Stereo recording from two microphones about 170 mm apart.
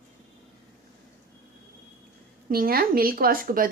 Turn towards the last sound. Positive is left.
turn(degrees=-55)  # may be behind; listen again after turning